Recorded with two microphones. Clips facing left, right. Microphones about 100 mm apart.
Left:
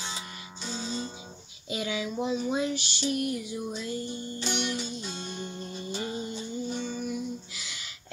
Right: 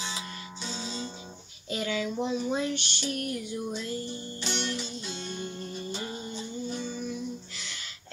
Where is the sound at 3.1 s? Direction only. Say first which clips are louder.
Left 3 dB; 50° right (ahead or behind).